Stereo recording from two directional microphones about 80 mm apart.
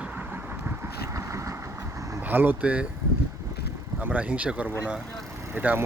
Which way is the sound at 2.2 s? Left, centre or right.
Right.